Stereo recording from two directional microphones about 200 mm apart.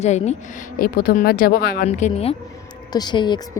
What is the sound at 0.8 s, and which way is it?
Speech, 45° left (ahead or behind).